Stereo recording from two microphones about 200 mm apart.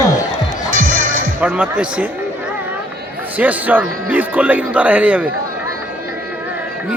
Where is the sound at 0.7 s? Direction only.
45° right (ahead or behind).